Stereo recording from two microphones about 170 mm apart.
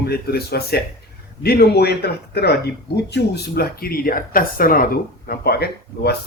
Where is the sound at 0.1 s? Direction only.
65° left (ahead or behind).